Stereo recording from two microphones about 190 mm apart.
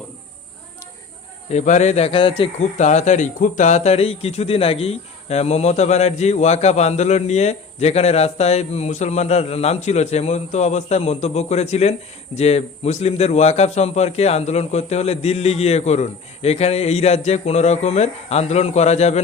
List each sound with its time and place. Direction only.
1.5 s speech: 40° left (ahead or behind)